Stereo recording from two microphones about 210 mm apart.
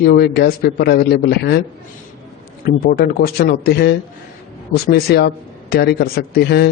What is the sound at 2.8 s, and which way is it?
A man's voice, 45° left (ahead or behind).